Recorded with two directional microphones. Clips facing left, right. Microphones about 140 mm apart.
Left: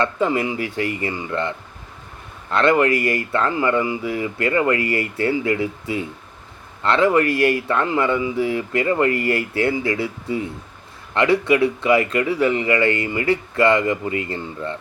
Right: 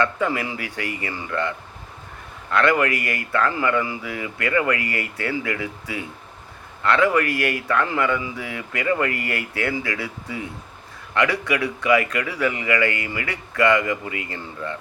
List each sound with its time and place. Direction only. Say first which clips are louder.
0.0 s speech: left 3 dB; 25° left (ahead or behind)